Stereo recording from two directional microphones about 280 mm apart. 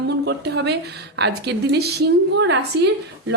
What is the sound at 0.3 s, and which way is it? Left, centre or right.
Speech, right.